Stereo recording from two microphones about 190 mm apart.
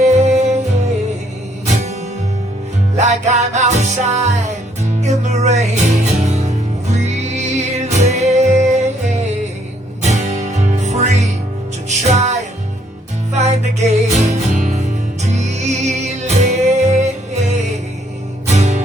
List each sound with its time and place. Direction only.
0.0 s music: 35° right (ahead or behind)
1.6 s music: 35° right (ahead or behind)
3.0 s music: 35° right (ahead or behind)
10.0 s music: 35° right (ahead or behind)
13.3 s music: 35° right (ahead or behind)